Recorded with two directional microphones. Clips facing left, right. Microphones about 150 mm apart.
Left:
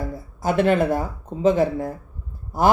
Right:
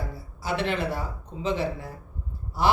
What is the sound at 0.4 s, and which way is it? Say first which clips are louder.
Speech: left 9 dB; 45° left (ahead or behind).